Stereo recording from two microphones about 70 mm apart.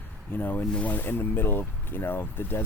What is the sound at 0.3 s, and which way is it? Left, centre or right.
Speech, left.